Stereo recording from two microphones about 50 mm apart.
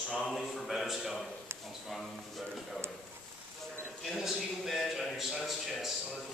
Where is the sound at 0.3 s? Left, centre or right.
Centre.